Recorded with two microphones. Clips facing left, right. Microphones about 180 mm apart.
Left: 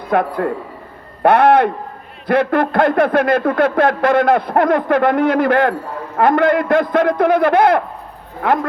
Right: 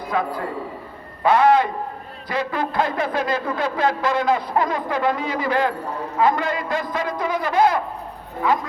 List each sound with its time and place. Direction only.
0.1 s speech: 60° left (ahead or behind)